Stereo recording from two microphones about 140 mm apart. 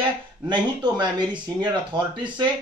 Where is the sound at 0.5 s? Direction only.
35° right (ahead or behind).